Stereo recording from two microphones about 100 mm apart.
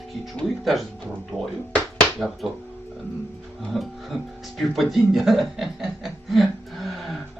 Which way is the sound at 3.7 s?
Centre (ahead or behind).